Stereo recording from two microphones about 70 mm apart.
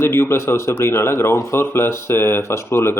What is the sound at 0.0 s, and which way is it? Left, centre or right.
Speech, left.